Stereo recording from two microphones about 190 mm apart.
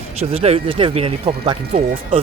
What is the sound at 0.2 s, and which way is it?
Speech, 30° right (ahead or behind).